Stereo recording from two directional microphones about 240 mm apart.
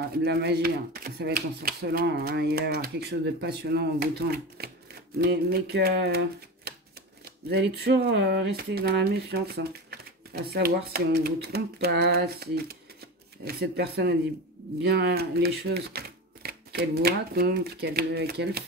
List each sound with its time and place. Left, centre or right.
0.2 s speech: right